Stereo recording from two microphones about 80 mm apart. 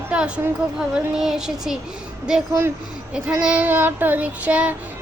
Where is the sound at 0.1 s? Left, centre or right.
Centre.